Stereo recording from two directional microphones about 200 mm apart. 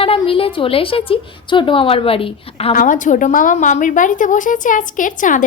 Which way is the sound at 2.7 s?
40° left (ahead or behind).